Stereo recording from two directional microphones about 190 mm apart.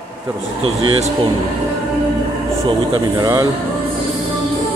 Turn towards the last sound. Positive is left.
turn(degrees=-20)  # may be behind; listen again after turning